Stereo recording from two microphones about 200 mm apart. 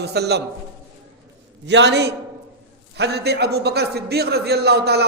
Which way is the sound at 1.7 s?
60° right (ahead or behind).